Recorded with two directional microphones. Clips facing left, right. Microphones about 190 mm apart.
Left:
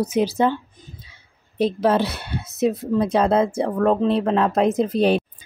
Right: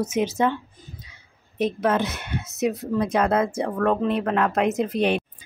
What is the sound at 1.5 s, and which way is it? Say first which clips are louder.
Speech: left 3 dB; 30° left (ahead or behind).